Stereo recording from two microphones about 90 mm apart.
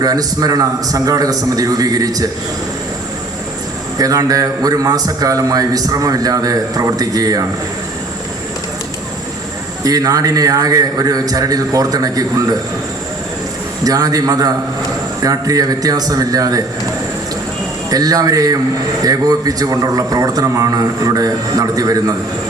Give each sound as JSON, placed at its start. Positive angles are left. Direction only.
{"t": 0.0, "sound": "a man's voice", "side_deg": -45}
{"t": 3.9, "sound": "a man's voice", "side_deg": -40}
{"t": 9.8, "sound": "a man's voice", "side_deg": -40}
{"t": 13.8, "sound": "a man's voice", "side_deg": -40}
{"t": 17.9, "sound": "a man's voice", "side_deg": -45}